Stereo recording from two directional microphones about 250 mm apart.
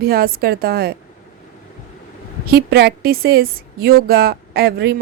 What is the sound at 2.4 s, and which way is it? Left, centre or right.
Speech, right.